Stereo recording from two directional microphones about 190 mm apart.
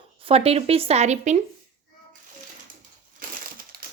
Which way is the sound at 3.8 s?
50° right (ahead or behind).